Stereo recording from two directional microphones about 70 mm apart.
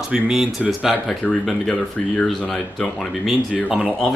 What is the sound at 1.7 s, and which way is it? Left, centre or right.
Speech, centre.